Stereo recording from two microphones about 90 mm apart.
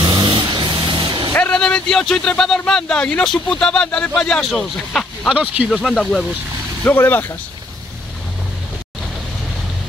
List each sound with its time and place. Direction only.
0.0 s vehicle: 50° right (ahead or behind)
1.3 s speech: 15° left (ahead or behind)
5.3 s speech: 15° right (ahead or behind)
5.7 s speech: centre (ahead or behind)
6.8 s speech: 20° left (ahead or behind)